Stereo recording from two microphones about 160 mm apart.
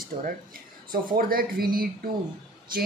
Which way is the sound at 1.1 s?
65° right (ahead or behind).